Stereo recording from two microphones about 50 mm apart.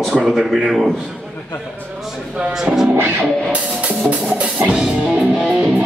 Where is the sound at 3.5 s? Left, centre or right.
Right.